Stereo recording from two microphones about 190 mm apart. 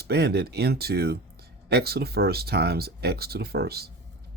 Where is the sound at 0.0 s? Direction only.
60° right (ahead or behind).